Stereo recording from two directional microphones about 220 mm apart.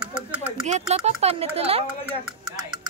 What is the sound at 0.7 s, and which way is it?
Speech, 30° right (ahead or behind).